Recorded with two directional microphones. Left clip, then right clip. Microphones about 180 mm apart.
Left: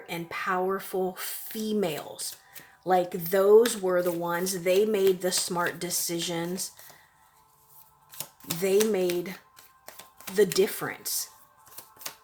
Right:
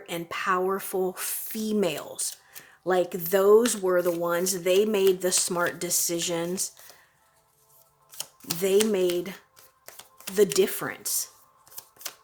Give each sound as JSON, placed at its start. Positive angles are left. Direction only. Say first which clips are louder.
{"t": 0.0, "sound": "speech", "louder": "right 2 dB", "side_deg": -35}
{"t": 8.6, "sound": "speech", "louder": "right 1 dB", "side_deg": -30}
{"t": 9.8, "sound": "a sound", "louder": "right 1 dB", "side_deg": -15}
{"t": 10.3, "sound": "speech", "louder": "right 1 dB", "side_deg": -30}